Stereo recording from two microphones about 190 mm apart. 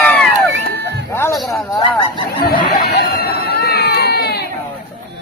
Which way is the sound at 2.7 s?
55° left (ahead or behind).